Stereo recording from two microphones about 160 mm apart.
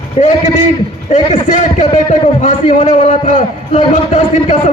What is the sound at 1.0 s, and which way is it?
A man's voice, 50° left (ahead or behind).